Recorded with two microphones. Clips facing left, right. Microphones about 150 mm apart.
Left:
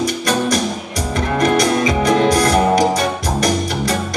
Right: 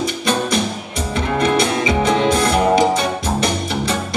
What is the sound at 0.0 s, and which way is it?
Music, 25° right (ahead or behind).